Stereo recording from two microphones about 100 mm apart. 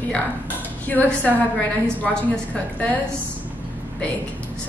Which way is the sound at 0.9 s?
15° left (ahead or behind).